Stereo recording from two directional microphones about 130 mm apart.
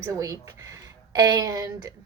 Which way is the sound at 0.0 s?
25° right (ahead or behind).